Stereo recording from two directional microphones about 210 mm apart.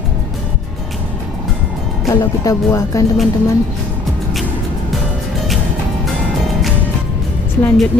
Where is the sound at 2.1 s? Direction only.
15° left (ahead or behind).